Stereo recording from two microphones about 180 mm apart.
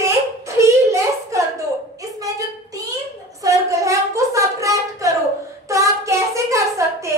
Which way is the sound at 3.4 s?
15° right (ahead or behind).